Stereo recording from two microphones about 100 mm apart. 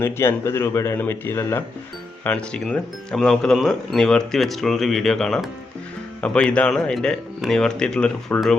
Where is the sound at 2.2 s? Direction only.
10° left (ahead or behind).